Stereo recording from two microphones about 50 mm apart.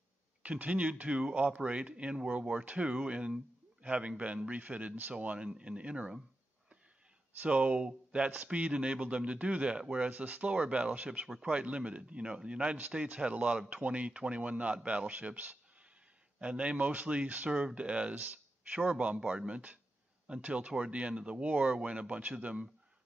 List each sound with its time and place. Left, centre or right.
0.4 s a man's voice: right
7.4 s speech: right
17.5 s speech: centre